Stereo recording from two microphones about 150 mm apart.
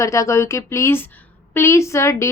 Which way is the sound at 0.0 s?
20° left (ahead or behind).